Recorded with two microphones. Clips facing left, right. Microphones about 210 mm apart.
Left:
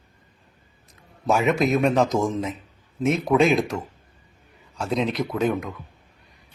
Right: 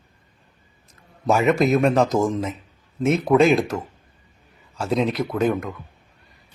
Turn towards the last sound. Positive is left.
turn(degrees=0)  # may be behind; listen again after turning